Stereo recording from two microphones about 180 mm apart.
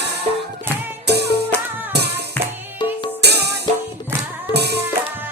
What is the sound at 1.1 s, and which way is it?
Music, 65° right (ahead or behind).